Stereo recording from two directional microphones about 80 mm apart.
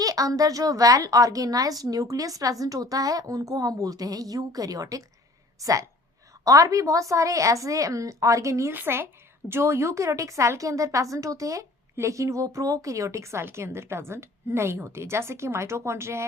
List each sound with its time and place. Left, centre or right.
0.0 s a woman's voice: right
8.7 s a woman's voice: right